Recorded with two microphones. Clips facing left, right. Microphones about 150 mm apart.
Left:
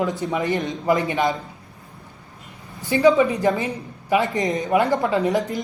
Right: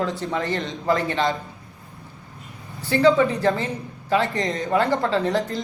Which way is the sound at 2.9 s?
20° left (ahead or behind).